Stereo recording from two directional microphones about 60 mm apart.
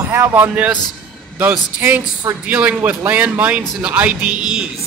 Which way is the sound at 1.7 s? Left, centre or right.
Right.